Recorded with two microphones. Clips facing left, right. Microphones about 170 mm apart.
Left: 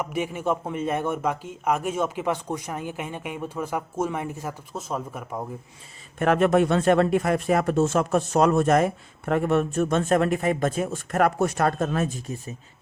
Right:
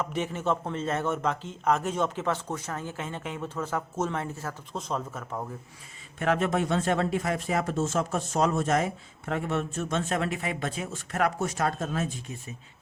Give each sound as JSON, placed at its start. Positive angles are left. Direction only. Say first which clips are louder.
{"t": 0.0, "sound": "a man's voice", "louder": "left 3 dB", "side_deg": 10}
{"t": 6.1, "sound": "speech", "louder": "left 7 dB", "side_deg": 55}